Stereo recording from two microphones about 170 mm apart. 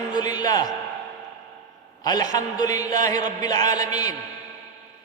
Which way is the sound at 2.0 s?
25° left (ahead or behind).